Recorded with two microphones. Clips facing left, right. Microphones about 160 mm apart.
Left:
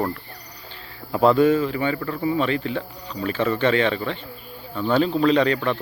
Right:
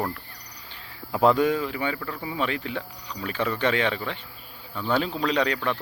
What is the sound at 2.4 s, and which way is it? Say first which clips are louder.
Speech: left 5 dB; 10° right (ahead or behind).